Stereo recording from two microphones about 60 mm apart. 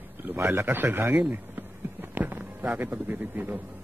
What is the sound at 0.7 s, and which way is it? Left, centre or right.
Speech, right.